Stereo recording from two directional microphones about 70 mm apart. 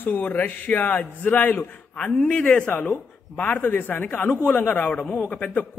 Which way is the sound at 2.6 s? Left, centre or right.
Left.